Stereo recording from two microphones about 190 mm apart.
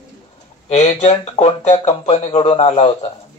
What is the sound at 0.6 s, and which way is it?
Speech, 35° left (ahead or behind).